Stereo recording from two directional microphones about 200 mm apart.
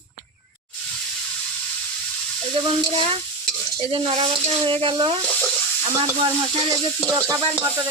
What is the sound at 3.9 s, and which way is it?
Speech, 25° right (ahead or behind).